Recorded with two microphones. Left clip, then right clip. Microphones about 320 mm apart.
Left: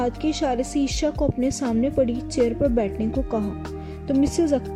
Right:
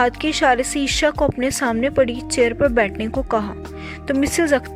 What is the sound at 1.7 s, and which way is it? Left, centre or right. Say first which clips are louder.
Speech: right 2 dB; right.